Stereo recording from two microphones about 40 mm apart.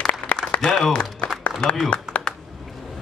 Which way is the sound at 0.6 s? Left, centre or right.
Left.